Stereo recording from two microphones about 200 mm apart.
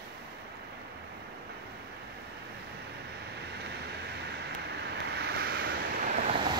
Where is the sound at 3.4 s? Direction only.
55° right (ahead or behind).